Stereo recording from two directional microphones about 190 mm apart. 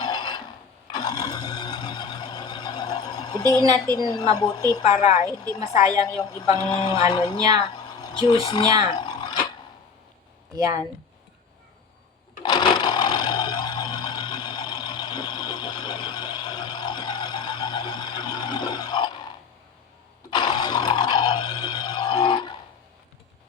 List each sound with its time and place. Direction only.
0.0 s a sound: 25° left (ahead or behind)
0.9 s sewing machine: 20° left (ahead or behind)
3.9 s a woman's voice: 20° left (ahead or behind)
5.0 s a woman's voice: 15° right (ahead or behind)
6.3 s a woman's voice: 25° left (ahead or behind)
7.8 s a sound: 25° left (ahead or behind)
10.5 s speech: 20° right (ahead or behind)
12.4 s sewing machine: 25° left (ahead or behind)
20.3 s a sound: 25° left (ahead or behind)